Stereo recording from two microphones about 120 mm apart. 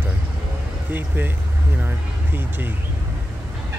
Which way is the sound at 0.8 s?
15° right (ahead or behind).